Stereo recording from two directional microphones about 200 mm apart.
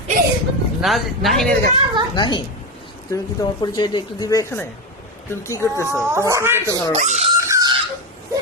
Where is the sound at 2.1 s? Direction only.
25° left (ahead or behind).